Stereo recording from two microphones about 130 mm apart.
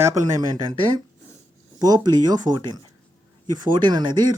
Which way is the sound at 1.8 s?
30° right (ahead or behind).